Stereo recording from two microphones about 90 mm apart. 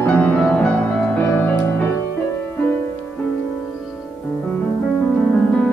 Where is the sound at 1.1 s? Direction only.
20° left (ahead or behind).